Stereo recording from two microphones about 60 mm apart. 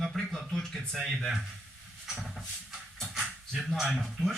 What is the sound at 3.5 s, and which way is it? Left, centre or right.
Speech, centre.